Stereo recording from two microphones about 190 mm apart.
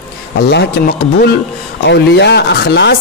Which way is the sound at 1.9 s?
65° left (ahead or behind).